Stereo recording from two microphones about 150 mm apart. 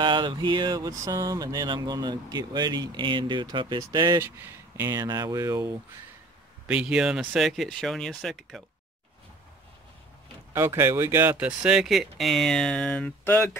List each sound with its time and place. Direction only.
0.0 s speech: 30° right (ahead or behind)
6.7 s speech: 5° right (ahead or behind)
10.5 s speech: 15° right (ahead or behind); by 13.6 s 15° left (ahead or behind)